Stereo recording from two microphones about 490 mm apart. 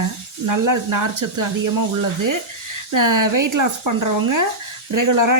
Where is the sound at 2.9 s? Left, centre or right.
Right.